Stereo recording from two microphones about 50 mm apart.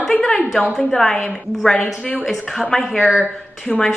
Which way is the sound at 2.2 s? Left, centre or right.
Centre.